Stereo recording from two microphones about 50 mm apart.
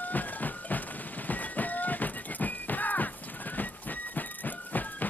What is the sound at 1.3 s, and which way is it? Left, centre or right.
Music, left.